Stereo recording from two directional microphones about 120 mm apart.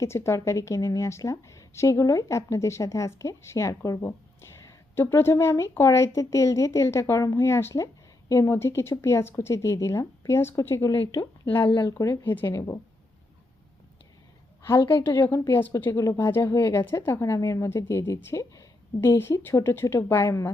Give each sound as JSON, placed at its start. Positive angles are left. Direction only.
{"t": 0.0, "sound": "a woman's voice", "side_deg": 25}
{"t": 10.9, "sound": "speech", "side_deg": 45}
{"t": 11.8, "sound": "a woman's voice", "side_deg": 25}
{"t": 14.9, "sound": "a woman's voice", "side_deg": 20}